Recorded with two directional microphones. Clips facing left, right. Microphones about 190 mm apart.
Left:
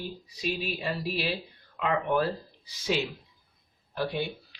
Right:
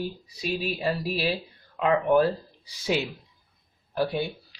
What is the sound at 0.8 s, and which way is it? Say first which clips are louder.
Speech: right 4 dB; 40° right (ahead or behind).